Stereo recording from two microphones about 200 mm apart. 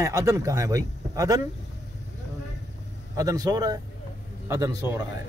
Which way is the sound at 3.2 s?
15° right (ahead or behind).